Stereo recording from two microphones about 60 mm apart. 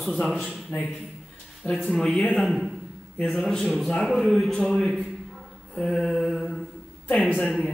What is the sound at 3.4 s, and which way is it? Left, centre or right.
Mantra, centre.